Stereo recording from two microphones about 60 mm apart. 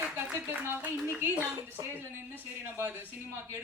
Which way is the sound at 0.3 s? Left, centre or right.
Right.